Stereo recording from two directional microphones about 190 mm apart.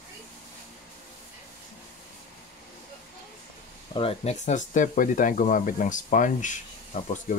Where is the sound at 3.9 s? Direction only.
30° left (ahead or behind).